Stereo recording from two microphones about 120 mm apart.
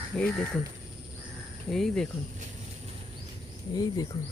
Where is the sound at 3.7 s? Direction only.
30° left (ahead or behind).